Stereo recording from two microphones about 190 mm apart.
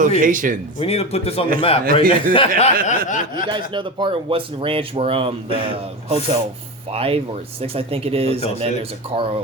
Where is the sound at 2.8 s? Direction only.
40° left (ahead or behind).